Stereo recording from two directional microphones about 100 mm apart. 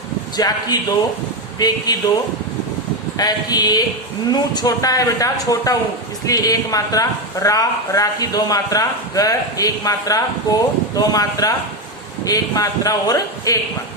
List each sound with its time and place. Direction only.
0.3 s a man's voice: 40° left (ahead or behind)
3.2 s a man's voice: 40° left (ahead or behind)